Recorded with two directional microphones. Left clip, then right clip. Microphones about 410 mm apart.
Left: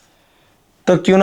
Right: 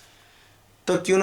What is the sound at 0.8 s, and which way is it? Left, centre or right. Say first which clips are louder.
Speech: left 8 dB; left.